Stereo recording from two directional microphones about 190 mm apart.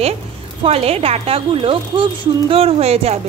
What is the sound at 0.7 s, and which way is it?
A woman's voice, 30° right (ahead or behind).